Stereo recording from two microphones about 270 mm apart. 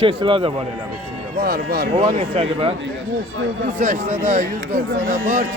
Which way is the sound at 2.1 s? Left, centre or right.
Right.